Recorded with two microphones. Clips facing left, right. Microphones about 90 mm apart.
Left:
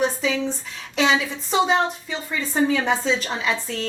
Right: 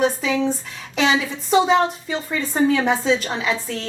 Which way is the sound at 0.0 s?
5° right (ahead or behind).